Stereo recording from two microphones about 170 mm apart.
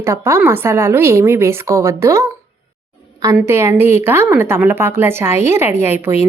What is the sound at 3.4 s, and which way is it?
A woman's voice, 15° right (ahead or behind).